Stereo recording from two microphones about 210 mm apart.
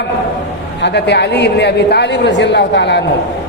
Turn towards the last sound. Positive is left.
turn(degrees=55)  # may be behind; listen again after turning